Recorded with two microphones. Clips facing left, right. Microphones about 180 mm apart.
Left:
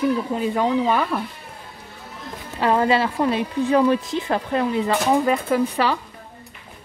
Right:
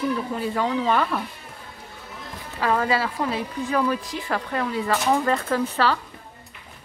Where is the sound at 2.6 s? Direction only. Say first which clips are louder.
Left 4 dB; 25° left (ahead or behind).